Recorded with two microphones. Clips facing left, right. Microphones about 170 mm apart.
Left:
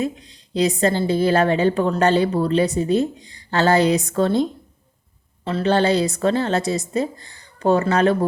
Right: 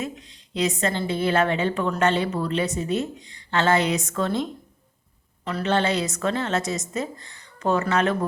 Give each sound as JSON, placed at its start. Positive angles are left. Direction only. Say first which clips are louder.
{"t": 0.0, "sound": "a woman's voice", "louder": "left 7 dB", "side_deg": 35}
{"t": 5.5, "sound": "a woman's voice", "louder": "left 5 dB", "side_deg": 30}